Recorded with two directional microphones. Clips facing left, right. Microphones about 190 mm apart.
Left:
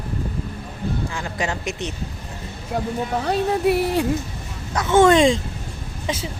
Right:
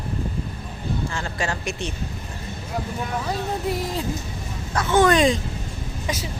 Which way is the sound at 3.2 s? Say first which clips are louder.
Left 9 dB; 65° left (ahead or behind).